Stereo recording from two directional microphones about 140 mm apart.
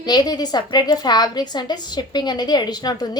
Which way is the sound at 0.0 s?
30° left (ahead or behind).